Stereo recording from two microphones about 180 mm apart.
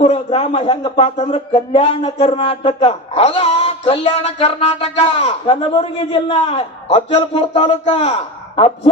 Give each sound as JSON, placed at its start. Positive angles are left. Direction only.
{"t": 0.0, "sound": "speech", "side_deg": 35}